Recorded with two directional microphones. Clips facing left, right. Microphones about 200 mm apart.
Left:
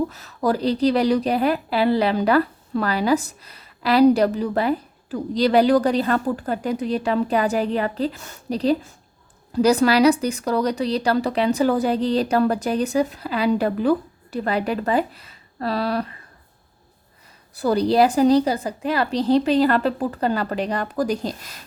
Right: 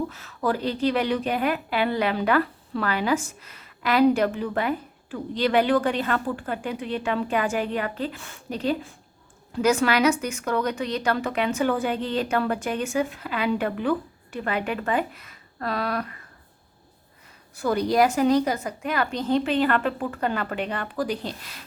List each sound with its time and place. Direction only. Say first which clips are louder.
0.1 s speech: left 4 dB; 40° left (ahead or behind)
17.5 s speech: left 4 dB; 35° left (ahead or behind)